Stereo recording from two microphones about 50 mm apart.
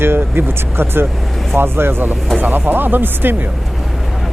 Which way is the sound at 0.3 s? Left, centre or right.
Right.